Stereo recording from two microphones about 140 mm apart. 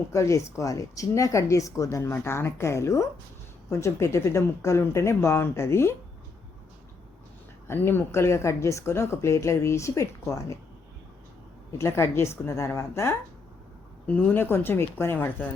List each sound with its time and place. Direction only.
0.1 s speech: 20° left (ahead or behind)
7.7 s speech: 15° left (ahead or behind)
11.8 s a woman's voice: 20° left (ahead or behind)